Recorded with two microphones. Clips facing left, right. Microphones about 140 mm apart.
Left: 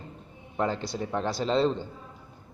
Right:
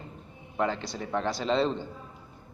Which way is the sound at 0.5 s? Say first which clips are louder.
Left 1 dB; 5° left (ahead or behind).